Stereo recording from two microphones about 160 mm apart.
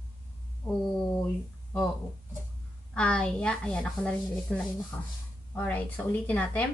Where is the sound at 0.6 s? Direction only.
30° left (ahead or behind).